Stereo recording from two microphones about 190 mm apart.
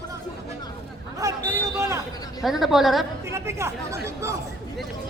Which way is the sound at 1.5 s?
15° right (ahead or behind).